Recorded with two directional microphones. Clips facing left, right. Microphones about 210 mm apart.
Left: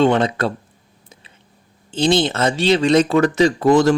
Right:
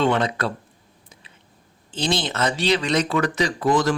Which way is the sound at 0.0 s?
25° left (ahead or behind).